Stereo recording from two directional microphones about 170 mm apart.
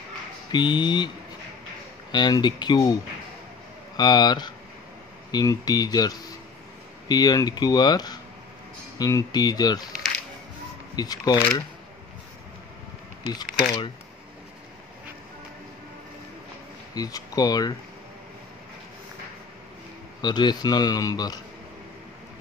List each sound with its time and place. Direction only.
0.5 s a man's voice: 25° left (ahead or behind)
2.1 s a man's voice: 25° left (ahead or behind)
3.9 s a man's voice: 25° left (ahead or behind)
11.0 s a man's voice: 25° left (ahead or behind)
13.3 s a man's voice: 25° left (ahead or behind)
16.9 s a man's voice: 20° left (ahead or behind)
20.2 s a man's voice: 25° left (ahead or behind)